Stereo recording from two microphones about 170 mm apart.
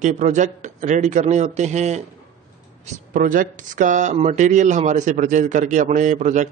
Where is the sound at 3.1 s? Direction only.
50° right (ahead or behind).